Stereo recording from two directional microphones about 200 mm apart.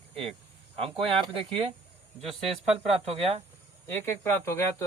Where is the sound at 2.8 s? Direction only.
30° right (ahead or behind).